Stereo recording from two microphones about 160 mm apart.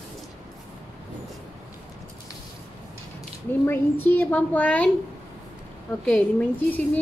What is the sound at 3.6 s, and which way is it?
A woman's voice, 15° left (ahead or behind).